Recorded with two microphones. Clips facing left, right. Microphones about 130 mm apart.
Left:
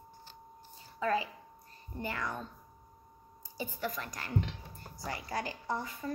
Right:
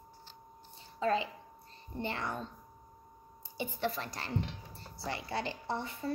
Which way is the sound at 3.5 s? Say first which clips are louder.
Right 2 dB; 20° right (ahead or behind).